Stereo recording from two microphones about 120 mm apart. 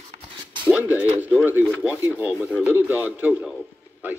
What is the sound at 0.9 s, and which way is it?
Speech, 15° right (ahead or behind).